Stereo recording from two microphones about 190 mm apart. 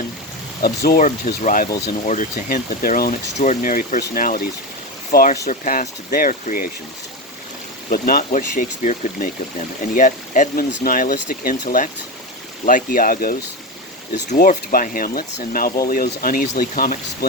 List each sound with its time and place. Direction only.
0.6 s speech: 50° left (ahead or behind)
7.9 s speech: 45° left (ahead or behind)